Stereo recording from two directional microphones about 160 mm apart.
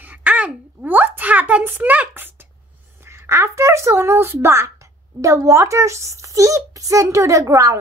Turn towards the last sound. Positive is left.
turn(degrees=-20)  # may be behind; listen again after turning